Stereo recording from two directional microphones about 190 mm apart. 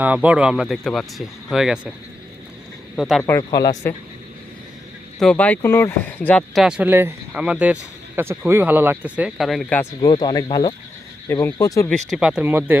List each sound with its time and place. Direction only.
0.0 s speech: 10° right (ahead or behind)
2.9 s speech: centre (ahead or behind)
3.2 s speech: 15° left (ahead or behind)
5.2 s speech: 5° left (ahead or behind)
10.0 s speech: 20° left (ahead or behind)
11.9 s speech: centre (ahead or behind)